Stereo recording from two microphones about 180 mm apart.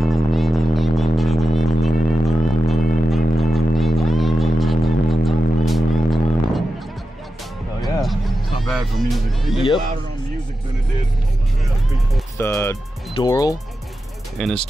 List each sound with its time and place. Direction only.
0.1 s music: centre (ahead or behind)
7.8 s music: centre (ahead or behind)
12.4 s speech: 15° left (ahead or behind)
14.4 s speech: 5° left (ahead or behind)